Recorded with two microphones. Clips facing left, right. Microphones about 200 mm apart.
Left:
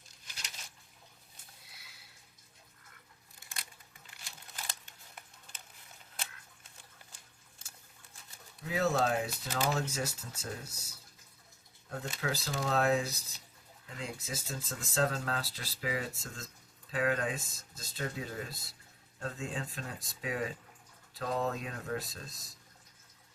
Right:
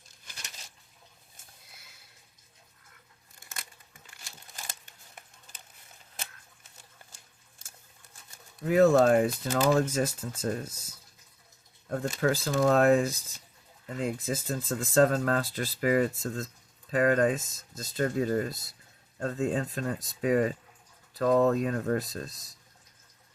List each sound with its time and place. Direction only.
8.6 s speech: 55° right (ahead or behind)
11.9 s speech: 50° right (ahead or behind)